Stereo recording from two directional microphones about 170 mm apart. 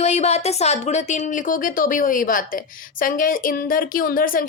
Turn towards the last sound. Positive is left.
turn(degrees=55)  # may be behind; listen again after turning